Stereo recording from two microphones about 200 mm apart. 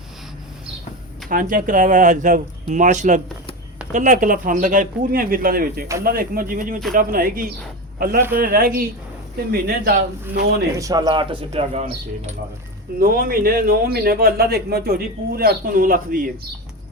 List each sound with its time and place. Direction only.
1.3 s a man's voice: 45° right (ahead or behind)
10.8 s speech: 20° right (ahead or behind); by 12.3 s 35° right (ahead or behind)
13.0 s a man's voice: 45° right (ahead or behind)